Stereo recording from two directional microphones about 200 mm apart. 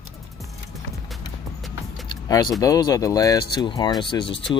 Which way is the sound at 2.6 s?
20° left (ahead or behind).